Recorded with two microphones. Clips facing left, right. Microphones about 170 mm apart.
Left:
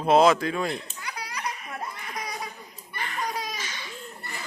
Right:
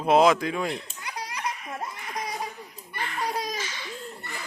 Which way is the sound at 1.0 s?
20° right (ahead or behind).